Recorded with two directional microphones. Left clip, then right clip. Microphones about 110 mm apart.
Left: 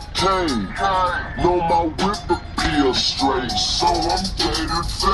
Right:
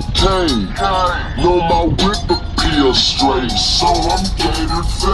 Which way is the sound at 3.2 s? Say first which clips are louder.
Right 5 dB; 15° right (ahead or behind).